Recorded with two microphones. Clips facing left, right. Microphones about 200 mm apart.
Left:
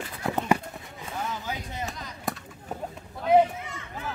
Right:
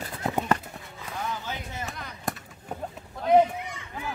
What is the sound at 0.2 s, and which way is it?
Run, 20° right (ahead or behind).